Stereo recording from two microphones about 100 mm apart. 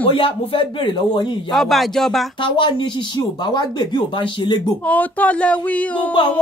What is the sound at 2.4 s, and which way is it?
Speech, 55° left (ahead or behind).